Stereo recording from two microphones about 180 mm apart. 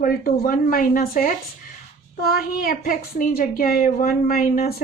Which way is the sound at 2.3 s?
55° left (ahead or behind).